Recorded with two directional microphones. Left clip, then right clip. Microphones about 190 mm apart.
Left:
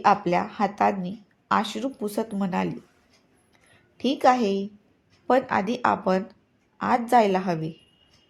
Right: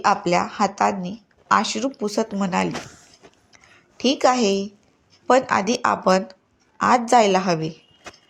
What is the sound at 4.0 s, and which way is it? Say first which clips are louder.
Speech: right 2 dB; 10° right (ahead or behind).